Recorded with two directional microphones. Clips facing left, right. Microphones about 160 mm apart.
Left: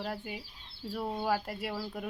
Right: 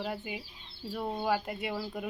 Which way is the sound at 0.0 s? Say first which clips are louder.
Right 1 dB; centre (ahead or behind).